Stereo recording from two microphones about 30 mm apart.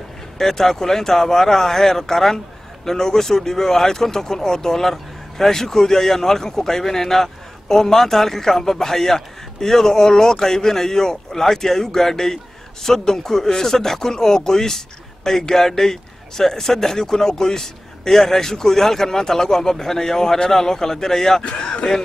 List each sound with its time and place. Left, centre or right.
0.4 s a man's voice: centre
21.5 s speech: left